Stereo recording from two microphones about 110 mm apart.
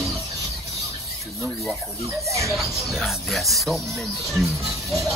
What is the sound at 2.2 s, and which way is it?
Speech, 25° right (ahead or behind).